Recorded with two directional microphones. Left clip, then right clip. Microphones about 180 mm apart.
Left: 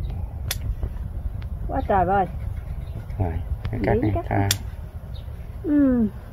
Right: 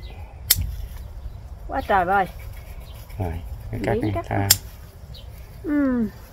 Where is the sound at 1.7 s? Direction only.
25° left (ahead or behind).